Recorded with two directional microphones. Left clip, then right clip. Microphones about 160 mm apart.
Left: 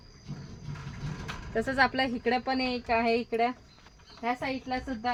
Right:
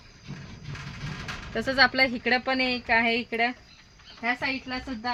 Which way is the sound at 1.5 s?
60° right (ahead or behind).